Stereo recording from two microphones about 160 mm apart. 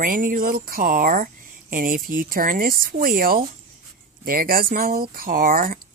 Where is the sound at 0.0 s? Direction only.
60° right (ahead or behind).